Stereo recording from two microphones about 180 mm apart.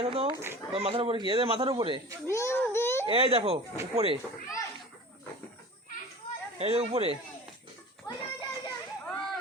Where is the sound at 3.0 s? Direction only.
30° right (ahead or behind).